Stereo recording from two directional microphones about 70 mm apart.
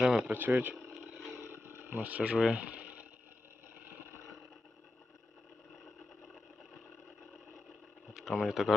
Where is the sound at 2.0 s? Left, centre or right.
Right.